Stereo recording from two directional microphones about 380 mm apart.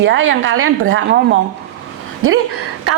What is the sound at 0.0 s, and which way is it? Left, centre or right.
A woman's voice, right.